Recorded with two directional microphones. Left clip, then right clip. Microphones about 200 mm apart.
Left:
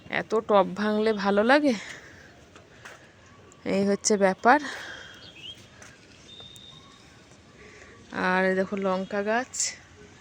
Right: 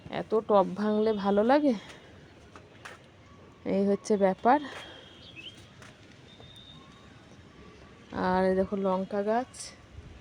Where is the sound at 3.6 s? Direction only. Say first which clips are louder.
Left 3 dB; 5° right (ahead or behind).